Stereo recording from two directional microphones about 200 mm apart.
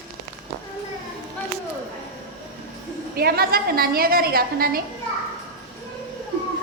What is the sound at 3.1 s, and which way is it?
A woman's voice, 50° right (ahead or behind).